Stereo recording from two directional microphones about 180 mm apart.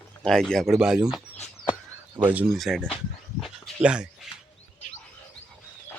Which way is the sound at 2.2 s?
10° right (ahead or behind).